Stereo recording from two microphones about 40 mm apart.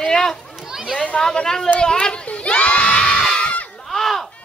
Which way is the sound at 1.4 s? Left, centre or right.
Centre.